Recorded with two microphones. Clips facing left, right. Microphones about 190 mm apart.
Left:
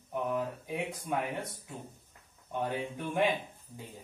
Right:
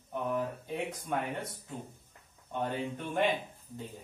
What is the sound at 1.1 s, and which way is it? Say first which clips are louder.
Speech: left 1 dB; 10° left (ahead or behind).